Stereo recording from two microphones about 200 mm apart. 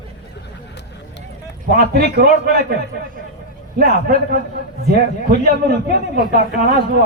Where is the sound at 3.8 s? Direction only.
50° right (ahead or behind).